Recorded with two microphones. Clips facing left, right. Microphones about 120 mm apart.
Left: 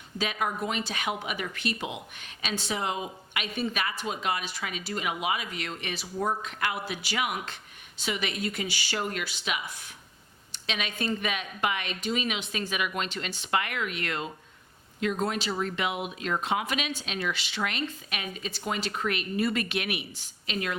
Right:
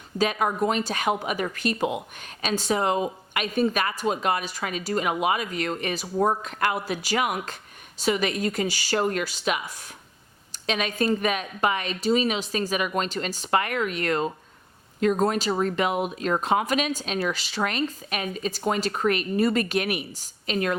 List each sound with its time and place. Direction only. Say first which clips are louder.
0.2 s speech: right 7 dB; 45° right (ahead or behind)